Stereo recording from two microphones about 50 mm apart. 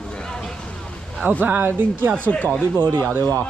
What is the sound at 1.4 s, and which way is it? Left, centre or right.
Speech, right.